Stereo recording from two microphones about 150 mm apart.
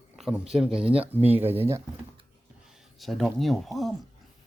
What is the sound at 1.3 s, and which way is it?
Speech, 15° right (ahead or behind).